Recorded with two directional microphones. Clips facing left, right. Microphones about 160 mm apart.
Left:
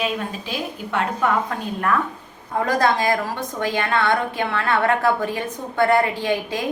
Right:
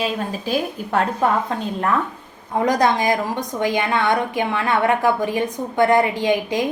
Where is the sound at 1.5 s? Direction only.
25° right (ahead or behind).